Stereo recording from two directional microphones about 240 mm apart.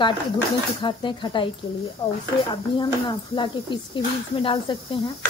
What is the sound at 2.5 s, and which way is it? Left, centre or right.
Speech, centre.